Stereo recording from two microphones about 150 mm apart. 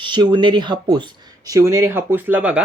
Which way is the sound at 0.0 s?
30° right (ahead or behind).